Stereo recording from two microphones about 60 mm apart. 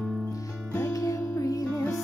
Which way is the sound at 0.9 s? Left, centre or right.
Left.